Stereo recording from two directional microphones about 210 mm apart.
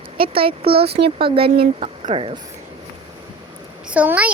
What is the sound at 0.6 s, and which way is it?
Speech, 50° right (ahead or behind).